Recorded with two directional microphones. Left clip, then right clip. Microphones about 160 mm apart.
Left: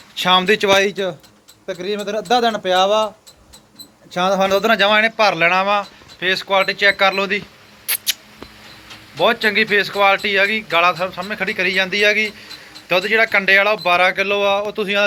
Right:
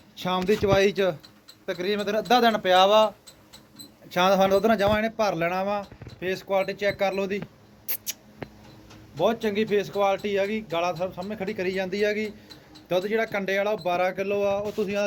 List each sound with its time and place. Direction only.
0.2 s speech: 10° right (ahead or behind)
4.1 s speech: 10° right (ahead or behind)
7.9 s mouse: 15° right (ahead or behind)
9.2 s a man's voice: 15° right (ahead or behind)